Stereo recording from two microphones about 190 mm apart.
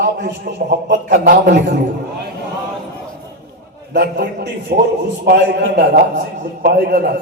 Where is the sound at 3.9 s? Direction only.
60° right (ahead or behind).